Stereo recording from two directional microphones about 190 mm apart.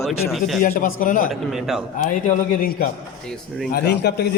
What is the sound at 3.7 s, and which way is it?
Speech, 60° left (ahead or behind).